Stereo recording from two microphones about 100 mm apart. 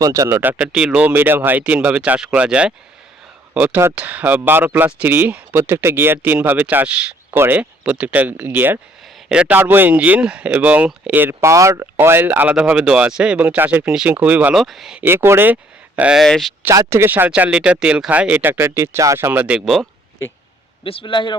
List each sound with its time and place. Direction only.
0.0 s speech: 35° right (ahead or behind)
0.7 s speech: 10° right (ahead or behind)
7.3 s speech: 25° right (ahead or behind)
11.9 s speech: 20° right (ahead or behind)
14.6 s speech: centre (ahead or behind)
15.0 s speech: 25° right (ahead or behind)
16.0 s speech: 10° right (ahead or behind)
16.2 s speech: 5° left (ahead or behind)
16.6 s speech: 25° right (ahead or behind); by 19.8 s 5° right (ahead or behind)
20.8 s a man's voice: 60° left (ahead or behind)